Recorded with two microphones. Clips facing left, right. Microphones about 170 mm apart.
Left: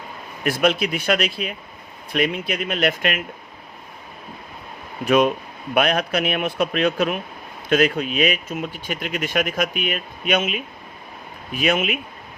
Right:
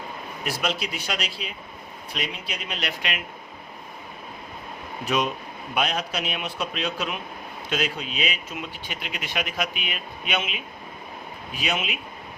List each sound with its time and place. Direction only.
0.4 s speech: 55° left (ahead or behind)
5.0 s speech: 55° left (ahead or behind)